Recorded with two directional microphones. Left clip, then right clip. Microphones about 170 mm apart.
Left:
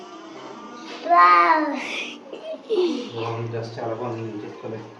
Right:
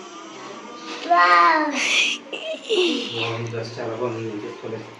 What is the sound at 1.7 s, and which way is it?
A child's voice, centre (ahead or behind).